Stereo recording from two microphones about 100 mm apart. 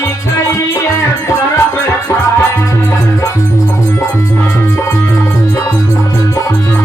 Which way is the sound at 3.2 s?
30° left (ahead or behind).